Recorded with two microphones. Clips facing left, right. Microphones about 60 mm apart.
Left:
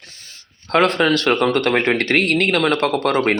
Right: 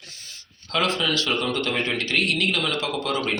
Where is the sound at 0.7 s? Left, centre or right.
Left.